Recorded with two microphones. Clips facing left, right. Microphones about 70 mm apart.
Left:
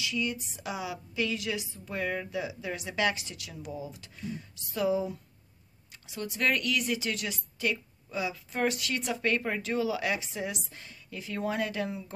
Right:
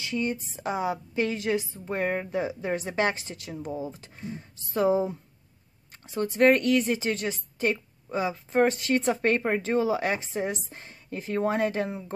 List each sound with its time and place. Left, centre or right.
0.0 s a woman's voice: right